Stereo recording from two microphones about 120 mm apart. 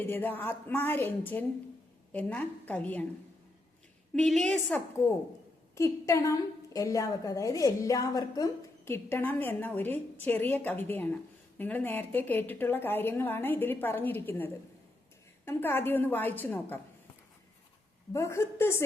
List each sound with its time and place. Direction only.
0.0 s a woman's voice: 15° left (ahead or behind)
4.1 s a woman's voice: 5° left (ahead or behind)
5.0 s a woman's voice: 25° left (ahead or behind)
18.1 s a woman's voice: 25° left (ahead or behind)